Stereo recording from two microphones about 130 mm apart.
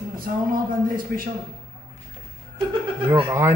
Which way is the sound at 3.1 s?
20° right (ahead or behind).